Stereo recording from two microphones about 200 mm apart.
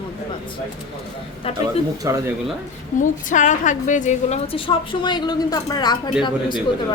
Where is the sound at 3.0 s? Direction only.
40° left (ahead or behind).